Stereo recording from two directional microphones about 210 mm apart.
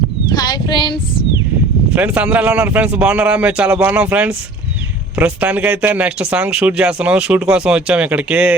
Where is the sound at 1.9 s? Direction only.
5° right (ahead or behind).